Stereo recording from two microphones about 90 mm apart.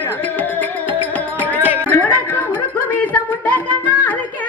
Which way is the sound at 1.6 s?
25° right (ahead or behind).